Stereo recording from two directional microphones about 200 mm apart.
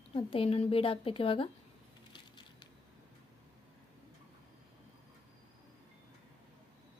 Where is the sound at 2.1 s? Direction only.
20° left (ahead or behind).